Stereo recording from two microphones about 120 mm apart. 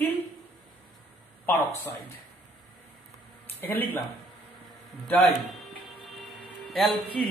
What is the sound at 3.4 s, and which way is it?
Speech, 15° left (ahead or behind).